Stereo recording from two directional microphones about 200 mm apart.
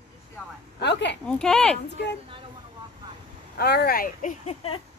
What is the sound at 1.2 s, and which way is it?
Speech, 5° left (ahead or behind).